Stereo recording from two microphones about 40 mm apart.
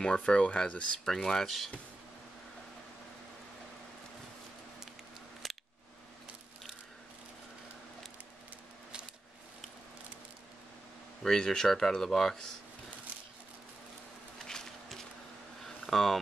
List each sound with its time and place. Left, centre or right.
0.0 s speech: left
1.0 s speech: centre
11.2 s speech: centre
14.4 s a sound: centre